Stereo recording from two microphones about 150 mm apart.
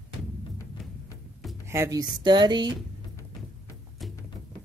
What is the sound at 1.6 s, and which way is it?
Speech, 20° right (ahead or behind).